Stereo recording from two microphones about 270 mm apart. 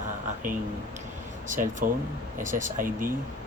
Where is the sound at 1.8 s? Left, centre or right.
Right.